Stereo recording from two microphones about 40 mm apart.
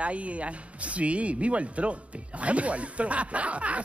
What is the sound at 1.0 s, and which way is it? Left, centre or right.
Speech, right.